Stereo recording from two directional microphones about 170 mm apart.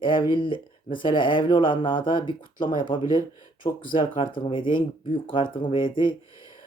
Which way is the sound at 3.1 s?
20° right (ahead or behind).